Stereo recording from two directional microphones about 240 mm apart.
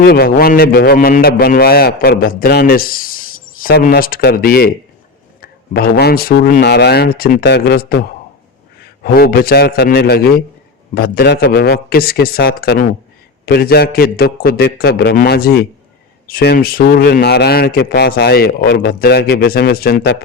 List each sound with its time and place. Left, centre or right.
0.0 s a man's voice: left
9.0 s a man's voice: left